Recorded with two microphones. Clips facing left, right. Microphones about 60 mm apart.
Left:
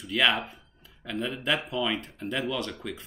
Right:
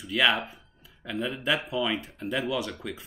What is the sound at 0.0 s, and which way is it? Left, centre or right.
Speech, centre.